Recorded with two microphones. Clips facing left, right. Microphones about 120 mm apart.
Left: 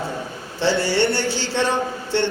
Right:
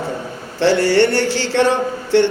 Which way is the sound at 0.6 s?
90° right.